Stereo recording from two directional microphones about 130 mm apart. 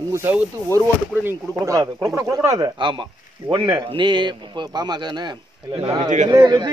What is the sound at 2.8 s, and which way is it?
A man's voice, 40° right (ahead or behind).